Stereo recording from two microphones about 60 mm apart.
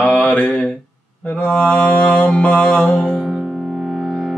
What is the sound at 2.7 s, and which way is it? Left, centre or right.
Music, centre.